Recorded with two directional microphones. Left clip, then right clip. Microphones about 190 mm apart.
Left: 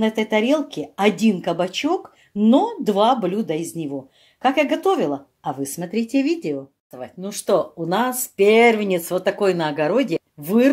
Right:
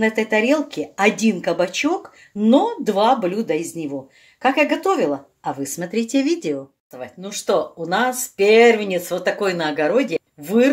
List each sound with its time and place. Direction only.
0.0 s speech: 20° left (ahead or behind)
6.9 s speech: 35° left (ahead or behind)